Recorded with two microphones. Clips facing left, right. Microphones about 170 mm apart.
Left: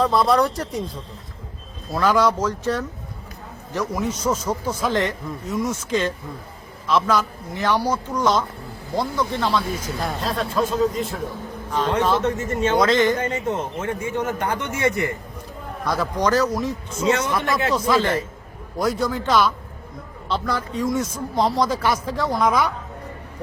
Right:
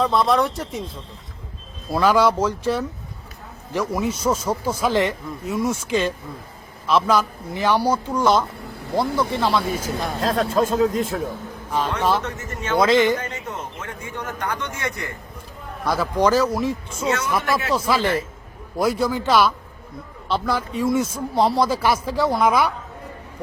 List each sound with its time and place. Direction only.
0.0 s a man's voice: centre (ahead or behind)
10.2 s a man's voice: 45° right (ahead or behind)
11.7 s a man's voice: 10° right (ahead or behind)
12.2 s speech: 25° left (ahead or behind)
12.8 s a man's voice: 10° right (ahead or behind)
13.1 s speech: 25° left (ahead or behind)
15.9 s a man's voice: 10° right (ahead or behind)
17.1 s speech: 25° left (ahead or behind)
17.7 s a man's voice: 10° right (ahead or behind)